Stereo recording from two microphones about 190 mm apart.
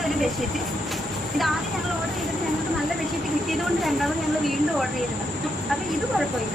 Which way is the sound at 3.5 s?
Centre (ahead or behind).